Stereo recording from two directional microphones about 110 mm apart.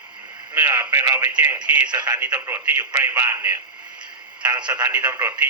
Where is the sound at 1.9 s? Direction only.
40° right (ahead or behind).